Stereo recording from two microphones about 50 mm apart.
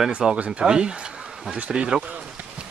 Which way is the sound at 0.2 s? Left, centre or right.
Centre.